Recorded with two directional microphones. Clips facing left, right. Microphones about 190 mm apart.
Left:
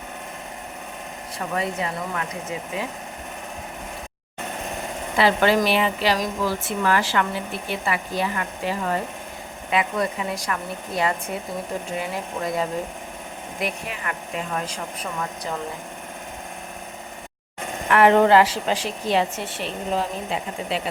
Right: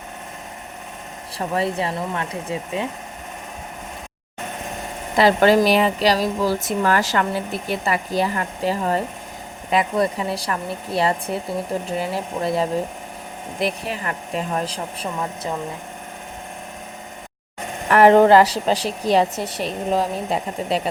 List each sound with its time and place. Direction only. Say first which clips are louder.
1.5 s speech: right 4 dB; 30° right (ahead or behind)
5.1 s speech: right 4 dB; 40° right (ahead or behind)
17.8 s speech: right 4 dB; 40° right (ahead or behind)